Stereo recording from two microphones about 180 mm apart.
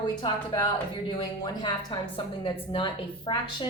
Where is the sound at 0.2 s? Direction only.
25° left (ahead or behind).